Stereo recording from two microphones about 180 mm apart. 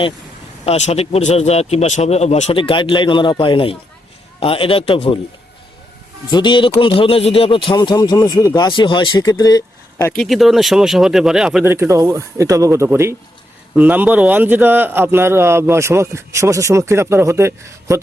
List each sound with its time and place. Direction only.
0.6 s speech: 35° left (ahead or behind)
6.3 s speech: 25° left (ahead or behind)
10.1 s speech: centre (ahead or behind); by 18.0 s 15° right (ahead or behind)